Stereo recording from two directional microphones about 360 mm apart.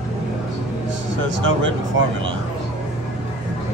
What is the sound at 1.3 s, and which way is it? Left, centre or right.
Speech, right.